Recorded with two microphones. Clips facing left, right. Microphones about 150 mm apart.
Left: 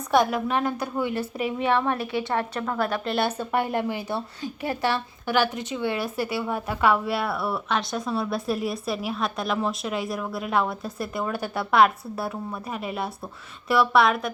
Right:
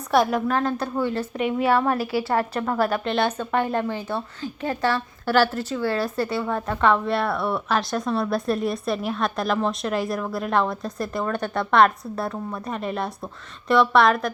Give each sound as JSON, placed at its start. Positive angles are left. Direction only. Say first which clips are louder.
{"t": 0.3, "sound": "a woman's voice", "louder": "right 2 dB", "side_deg": 10}
{"t": 1.2, "sound": "a woman's voice", "louder": "right 3 dB", "side_deg": 5}
{"t": 6.1, "sound": "a woman's voice", "louder": "right 2 dB", "side_deg": 5}